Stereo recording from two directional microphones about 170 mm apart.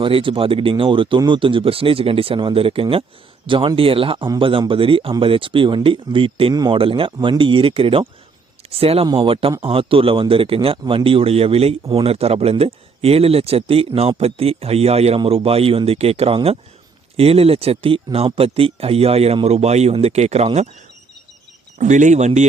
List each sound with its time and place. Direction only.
0.0 s speech: 30° right (ahead or behind)
21.8 s speech: 45° right (ahead or behind)